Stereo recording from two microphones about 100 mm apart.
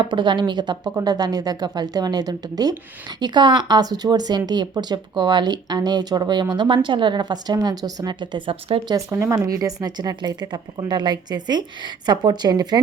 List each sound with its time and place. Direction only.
0.0 s a woman's voice: 50° right (ahead or behind)
8.9 s a woman's voice: 30° right (ahead or behind)